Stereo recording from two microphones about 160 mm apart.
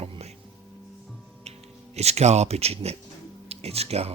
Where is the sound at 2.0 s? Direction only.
40° right (ahead or behind).